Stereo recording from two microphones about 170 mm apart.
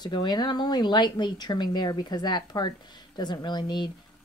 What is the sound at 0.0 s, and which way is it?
Speech, 25° left (ahead or behind).